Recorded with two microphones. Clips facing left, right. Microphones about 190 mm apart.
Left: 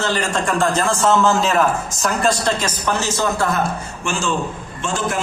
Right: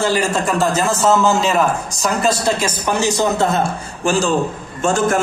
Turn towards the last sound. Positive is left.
turn(degrees=-45)  # may be behind; listen again after turning